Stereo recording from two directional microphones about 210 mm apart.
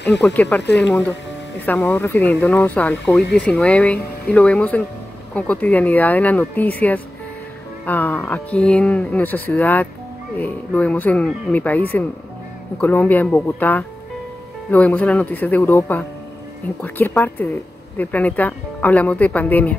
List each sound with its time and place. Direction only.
0.2 s speech: 5° left (ahead or behind)
0.6 s speech: 55° left (ahead or behind)
1.7 s speech: 10° left (ahead or behind)